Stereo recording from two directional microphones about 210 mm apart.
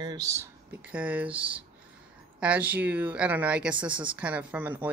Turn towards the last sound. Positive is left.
turn(degrees=-10)  # may be behind; listen again after turning